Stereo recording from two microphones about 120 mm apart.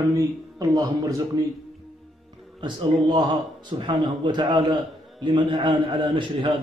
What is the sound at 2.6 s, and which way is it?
A man's voice, 40° right (ahead or behind).